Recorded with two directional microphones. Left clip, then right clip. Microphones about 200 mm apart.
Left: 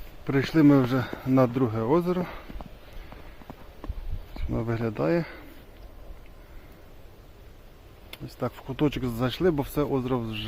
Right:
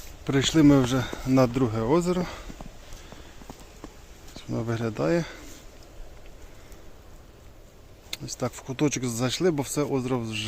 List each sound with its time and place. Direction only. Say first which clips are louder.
0.3 s speech: right 1 dB; 15° right (ahead or behind)
4.4 s speech: even; 5° right (ahead or behind)
8.1 s speech: right 1 dB; 10° right (ahead or behind)